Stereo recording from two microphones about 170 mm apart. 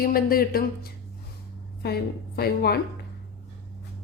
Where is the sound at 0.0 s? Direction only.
60° left (ahead or behind).